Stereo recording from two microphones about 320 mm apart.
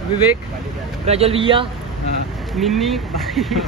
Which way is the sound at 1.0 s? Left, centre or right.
Centre.